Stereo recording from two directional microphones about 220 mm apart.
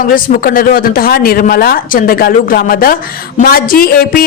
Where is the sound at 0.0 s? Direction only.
40° left (ahead or behind).